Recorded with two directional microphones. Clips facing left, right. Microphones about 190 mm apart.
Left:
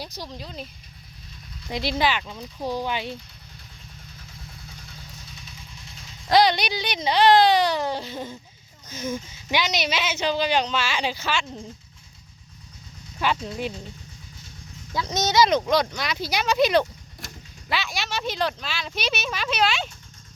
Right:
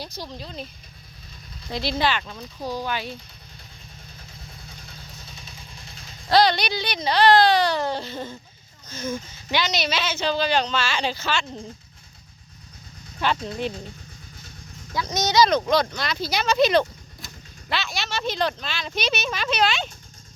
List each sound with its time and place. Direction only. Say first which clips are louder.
0.0 s speech: right 1 dB; 10° left (ahead or behind)
1.7 s speech: even; 15° left (ahead or behind)
6.3 s speech: even; 15° left (ahead or behind)
13.2 s speech: right 1 dB; 5° left (ahead or behind)
15.1 s speech: even; 15° right (ahead or behind)
15.4 s speech: right 1 dB; 20° left (ahead or behind)